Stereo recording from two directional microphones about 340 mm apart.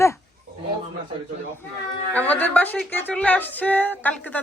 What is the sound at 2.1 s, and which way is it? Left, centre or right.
Speech, centre.